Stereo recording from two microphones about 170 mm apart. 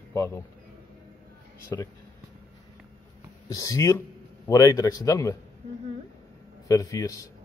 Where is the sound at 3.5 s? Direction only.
20° left (ahead or behind).